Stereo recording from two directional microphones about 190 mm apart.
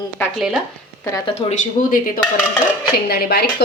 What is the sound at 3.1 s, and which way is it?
Speech, 55° left (ahead or behind).